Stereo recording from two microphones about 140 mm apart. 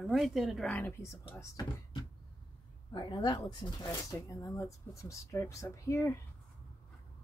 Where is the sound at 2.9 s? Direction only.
35° left (ahead or behind).